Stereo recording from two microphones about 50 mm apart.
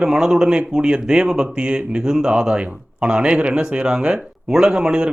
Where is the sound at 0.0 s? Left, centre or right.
Centre.